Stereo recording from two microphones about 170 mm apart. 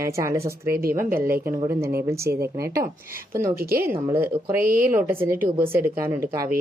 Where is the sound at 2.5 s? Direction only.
20° right (ahead or behind).